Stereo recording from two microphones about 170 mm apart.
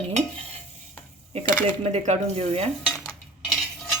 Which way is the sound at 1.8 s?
40° right (ahead or behind).